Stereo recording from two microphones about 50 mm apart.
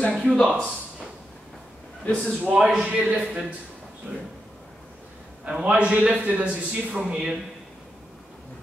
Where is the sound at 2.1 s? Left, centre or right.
Left.